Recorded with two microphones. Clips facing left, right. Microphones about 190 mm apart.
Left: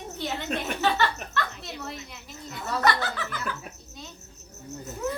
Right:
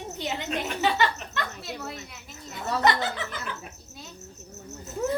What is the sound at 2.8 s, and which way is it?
Speech, 20° right (ahead or behind).